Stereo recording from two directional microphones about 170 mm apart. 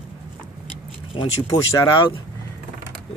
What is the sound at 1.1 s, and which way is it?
Speech, 30° left (ahead or behind).